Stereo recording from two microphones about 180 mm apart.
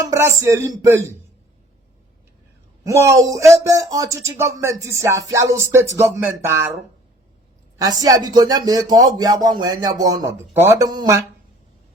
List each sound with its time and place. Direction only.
0.0 s speech: 15° right (ahead or behind)
2.8 s speech: 15° right (ahead or behind)
7.8 s speech: 20° right (ahead or behind)